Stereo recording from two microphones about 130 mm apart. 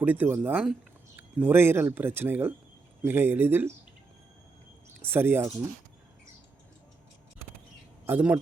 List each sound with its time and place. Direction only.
0.0 s speech: 15° right (ahead or behind)
5.0 s speech: 15° right (ahead or behind)
8.0 s a man's voice: 10° right (ahead or behind)